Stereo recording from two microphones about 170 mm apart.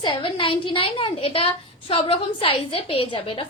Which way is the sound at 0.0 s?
30° left (ahead or behind).